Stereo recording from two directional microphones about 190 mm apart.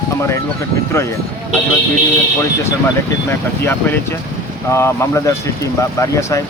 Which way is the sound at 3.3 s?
10° left (ahead or behind).